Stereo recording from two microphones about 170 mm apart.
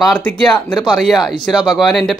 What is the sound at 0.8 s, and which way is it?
Speech, centre (ahead or behind).